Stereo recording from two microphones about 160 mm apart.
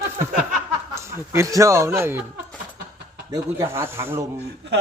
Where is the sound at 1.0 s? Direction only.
15° right (ahead or behind).